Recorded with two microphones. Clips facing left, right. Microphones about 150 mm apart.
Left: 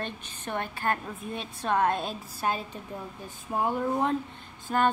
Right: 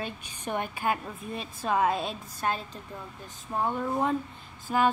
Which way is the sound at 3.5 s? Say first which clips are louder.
Left 1 dB; 5° left (ahead or behind).